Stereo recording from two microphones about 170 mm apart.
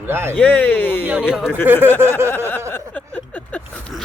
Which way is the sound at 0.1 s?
15° right (ahead or behind).